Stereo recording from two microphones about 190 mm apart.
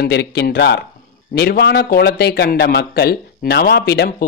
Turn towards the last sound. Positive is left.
turn(degrees=55)  # may be behind; listen again after turning